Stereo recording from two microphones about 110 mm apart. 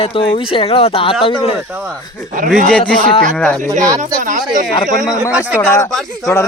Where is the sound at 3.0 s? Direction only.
55° left (ahead or behind).